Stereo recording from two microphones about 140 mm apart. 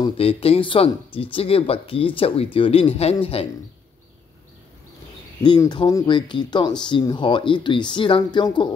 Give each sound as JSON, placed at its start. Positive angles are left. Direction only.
{"t": 0.0, "sound": "speech", "side_deg": 45}
{"t": 5.4, "sound": "speech", "side_deg": 30}